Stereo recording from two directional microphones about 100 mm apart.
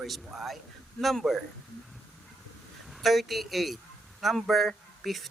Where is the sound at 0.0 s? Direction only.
Centre (ahead or behind).